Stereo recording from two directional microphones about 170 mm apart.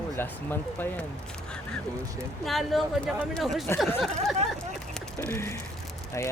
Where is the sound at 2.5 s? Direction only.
Centre (ahead or behind).